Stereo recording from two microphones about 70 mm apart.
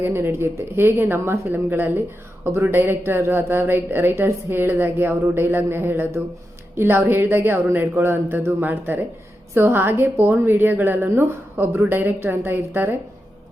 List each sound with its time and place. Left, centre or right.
0.0 s a woman's voice: right